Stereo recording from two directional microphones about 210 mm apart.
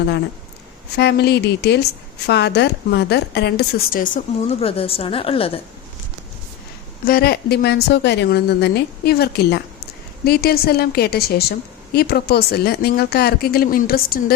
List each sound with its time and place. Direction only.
0.9 s a woman's voice: 50° left (ahead or behind); by 5.5 s 25° left (ahead or behind)
7.0 s a woman's voice: 45° left (ahead or behind)